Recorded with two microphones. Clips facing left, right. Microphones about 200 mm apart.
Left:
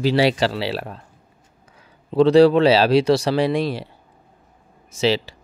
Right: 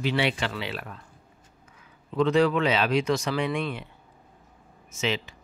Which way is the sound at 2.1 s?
30° left (ahead or behind).